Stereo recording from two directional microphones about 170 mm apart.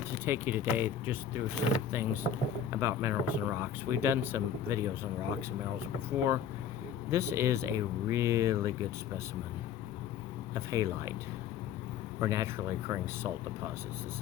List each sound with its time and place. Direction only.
0.3 s speech: 10° right (ahead or behind)
7.1 s speech: 15° right (ahead or behind)
10.5 s speech: 15° right (ahead or behind)
12.2 s speech: 15° right (ahead or behind)